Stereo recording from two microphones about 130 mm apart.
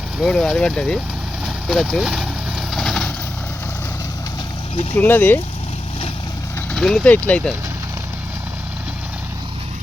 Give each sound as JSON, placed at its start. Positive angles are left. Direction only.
{"t": 0.3, "sound": "speech", "side_deg": 5}
{"t": 1.6, "sound": "vehicle", "side_deg": 0}
{"t": 4.9, "sound": "speech", "side_deg": 15}
{"t": 6.7, "sound": "speech", "side_deg": 5}